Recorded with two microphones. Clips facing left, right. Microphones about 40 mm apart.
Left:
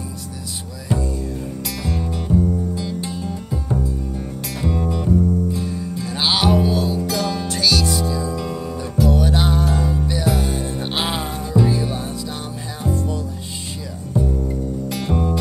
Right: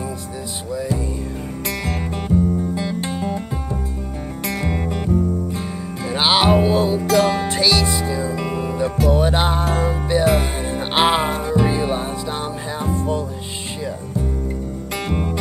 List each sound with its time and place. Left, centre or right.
1.9 s music: right
4.5 s music: right
7.0 s music: right
7.4 s music: right
15.0 s music: right